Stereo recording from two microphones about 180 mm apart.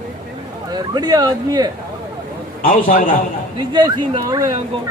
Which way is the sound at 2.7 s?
50° left (ahead or behind).